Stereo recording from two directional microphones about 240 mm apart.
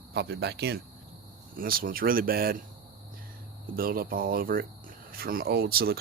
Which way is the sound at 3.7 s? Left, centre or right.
Right.